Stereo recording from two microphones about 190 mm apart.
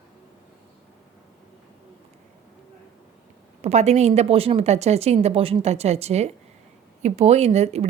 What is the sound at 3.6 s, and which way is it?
A woman's voice, 35° right (ahead or behind).